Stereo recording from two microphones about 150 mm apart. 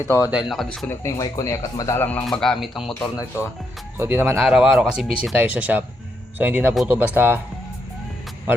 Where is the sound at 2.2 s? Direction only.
5° left (ahead or behind).